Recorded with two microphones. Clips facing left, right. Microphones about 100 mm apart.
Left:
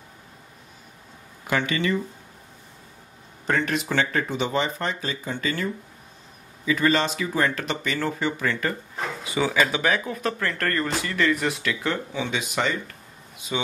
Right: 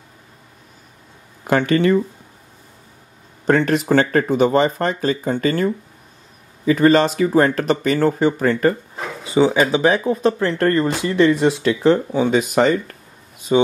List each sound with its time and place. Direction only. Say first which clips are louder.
1.5 s speech: right 9 dB; 45° right (ahead or behind)
3.4 s speech: right 9 dB; 40° right (ahead or behind)
8.9 s a sound: right 2 dB; 5° right (ahead or behind)
9.2 s speech: right 8 dB; 30° right (ahead or behind)